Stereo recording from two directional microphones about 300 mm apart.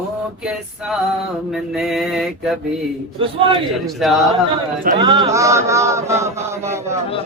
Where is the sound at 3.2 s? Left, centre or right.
Centre.